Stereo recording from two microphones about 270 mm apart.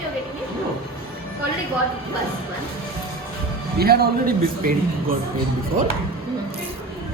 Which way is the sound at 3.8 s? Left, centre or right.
Right.